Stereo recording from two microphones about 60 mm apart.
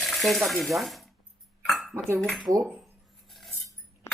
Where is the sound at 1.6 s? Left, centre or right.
Centre.